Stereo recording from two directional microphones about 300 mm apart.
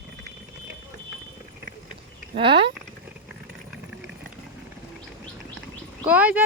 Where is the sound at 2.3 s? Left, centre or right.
Centre.